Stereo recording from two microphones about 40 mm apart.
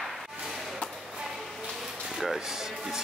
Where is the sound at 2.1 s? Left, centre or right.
Centre.